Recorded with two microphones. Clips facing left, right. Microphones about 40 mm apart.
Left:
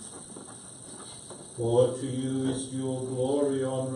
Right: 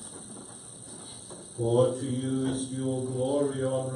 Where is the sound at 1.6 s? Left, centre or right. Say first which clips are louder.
Even; right.